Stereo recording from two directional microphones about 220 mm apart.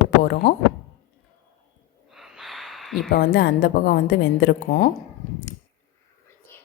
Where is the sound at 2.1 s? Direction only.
Centre (ahead or behind).